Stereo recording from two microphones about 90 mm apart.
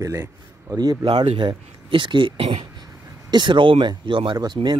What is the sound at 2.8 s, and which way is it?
Speech, 55° right (ahead or behind).